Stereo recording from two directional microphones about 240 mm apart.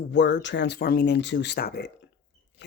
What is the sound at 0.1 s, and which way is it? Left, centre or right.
Speech, left.